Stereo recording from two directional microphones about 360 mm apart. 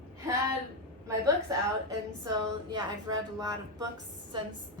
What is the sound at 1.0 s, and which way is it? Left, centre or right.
A woman's voice, centre.